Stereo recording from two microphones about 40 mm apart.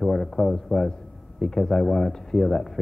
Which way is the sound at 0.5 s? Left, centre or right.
Centre.